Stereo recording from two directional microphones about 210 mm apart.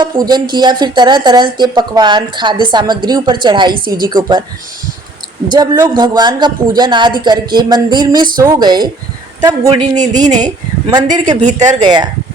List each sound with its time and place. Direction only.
0.0 s a woman's voice: 20° right (ahead or behind)
3.8 s a woman's voice: 45° right (ahead or behind)
4.0 s a woman's voice: 20° right (ahead or behind)
5.5 s a woman's voice: 20° right (ahead or behind)
11.3 s speech: 35° right (ahead or behind)